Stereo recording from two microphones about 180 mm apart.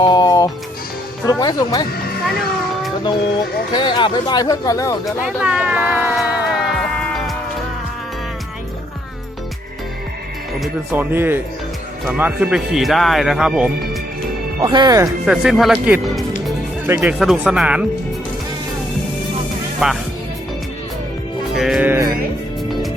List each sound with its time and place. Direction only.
0.0 s music: 25° left (ahead or behind)
1.2 s speech: 20° left (ahead or behind)
3.7 s speech: 25° left (ahead or behind)
5.0 s music: 5° right (ahead or behind)
10.9 s speech: 10° right (ahead or behind)
14.6 s speech: 25° right (ahead or behind)
15.3 s speech: centre (ahead or behind)
19.8 s speech: 5° right (ahead or behind)
21.5 s music: centre (ahead or behind)